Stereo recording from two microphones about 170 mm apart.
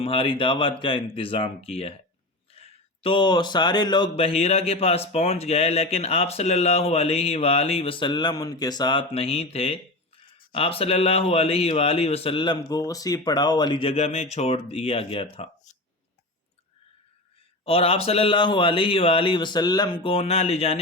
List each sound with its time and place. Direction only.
0.0 s speech: 30° left (ahead or behind)
17.7 s speech: 35° left (ahead or behind)